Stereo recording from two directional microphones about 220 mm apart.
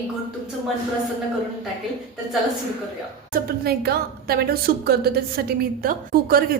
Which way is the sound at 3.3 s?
45° right (ahead or behind).